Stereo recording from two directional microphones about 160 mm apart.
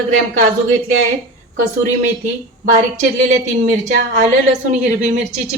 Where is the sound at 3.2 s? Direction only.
50° right (ahead or behind).